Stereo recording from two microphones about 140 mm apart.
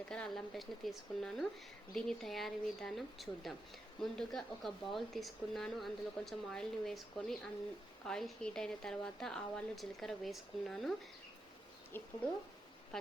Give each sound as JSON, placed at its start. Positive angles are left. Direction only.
{"t": 0.1, "sound": "speech", "side_deg": 5}
{"t": 11.9, "sound": "speech", "side_deg": 15}
{"t": 12.9, "sound": "speech", "side_deg": 5}